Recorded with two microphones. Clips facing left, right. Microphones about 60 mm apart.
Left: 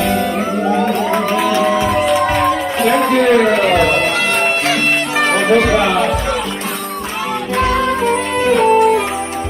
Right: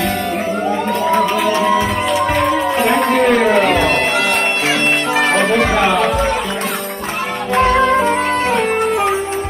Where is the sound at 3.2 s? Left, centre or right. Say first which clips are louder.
Even; centre.